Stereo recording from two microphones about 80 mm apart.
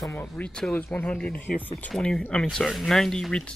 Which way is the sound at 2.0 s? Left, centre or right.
Centre.